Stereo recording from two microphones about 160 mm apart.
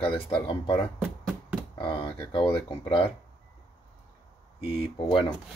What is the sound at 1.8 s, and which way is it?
Speech, 35° left (ahead or behind).